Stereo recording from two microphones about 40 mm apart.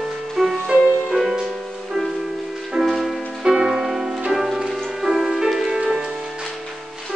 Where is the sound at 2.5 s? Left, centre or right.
Centre.